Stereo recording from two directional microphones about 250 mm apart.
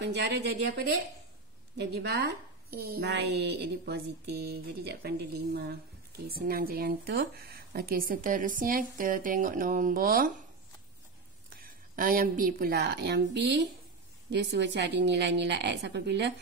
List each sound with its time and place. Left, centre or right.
0.0 s a woman's voice: right
11.5 s a woman's voice: right